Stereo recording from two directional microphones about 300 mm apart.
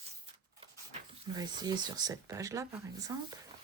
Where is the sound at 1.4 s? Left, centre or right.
Centre.